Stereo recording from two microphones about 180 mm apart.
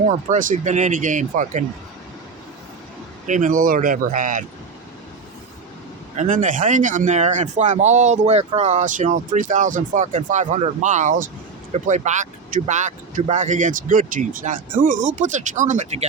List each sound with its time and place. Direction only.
0.1 s speech: 45° right (ahead or behind)
3.2 s speech: 45° right (ahead or behind)
6.1 s speech: 45° right (ahead or behind)